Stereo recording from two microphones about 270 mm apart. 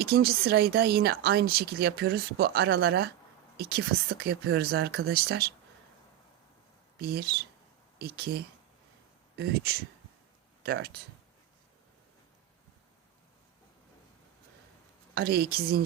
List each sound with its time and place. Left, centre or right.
0.0 s speech: right
7.0 s speech: right
15.1 s speech: right